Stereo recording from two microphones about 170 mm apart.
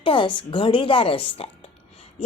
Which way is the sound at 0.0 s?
30° left (ahead or behind).